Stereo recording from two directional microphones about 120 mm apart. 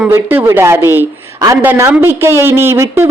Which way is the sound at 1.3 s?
30° right (ahead or behind).